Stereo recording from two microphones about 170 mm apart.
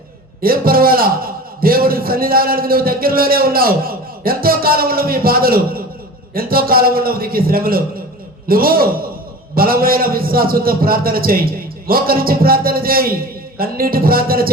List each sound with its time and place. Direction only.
0.4 s a man's voice: 60° right (ahead or behind)